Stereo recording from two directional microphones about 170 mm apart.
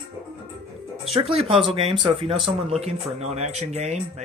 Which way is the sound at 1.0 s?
35° right (ahead or behind).